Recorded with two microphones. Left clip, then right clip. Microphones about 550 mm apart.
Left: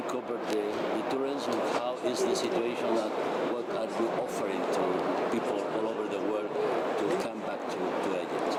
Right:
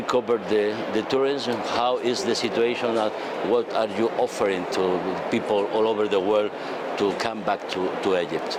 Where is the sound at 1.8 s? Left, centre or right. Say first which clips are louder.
Right 7 dB; right.